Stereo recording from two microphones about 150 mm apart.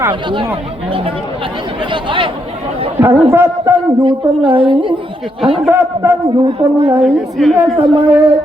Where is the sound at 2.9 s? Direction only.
15° right (ahead or behind).